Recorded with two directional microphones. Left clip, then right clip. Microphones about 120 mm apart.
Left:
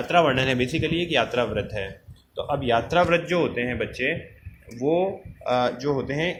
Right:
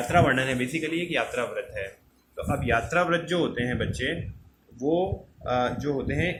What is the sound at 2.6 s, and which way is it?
Speech, 35° left (ahead or behind).